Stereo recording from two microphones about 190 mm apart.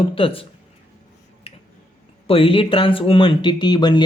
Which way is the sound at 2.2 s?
30° left (ahead or behind).